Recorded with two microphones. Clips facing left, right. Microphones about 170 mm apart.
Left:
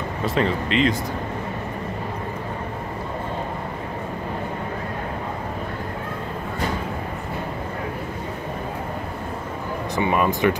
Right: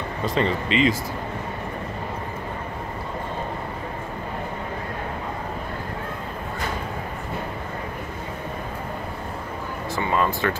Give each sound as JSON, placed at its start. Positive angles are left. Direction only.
{"t": 0.2, "sound": "speech", "side_deg": 0}
{"t": 9.9, "sound": "speech", "side_deg": 15}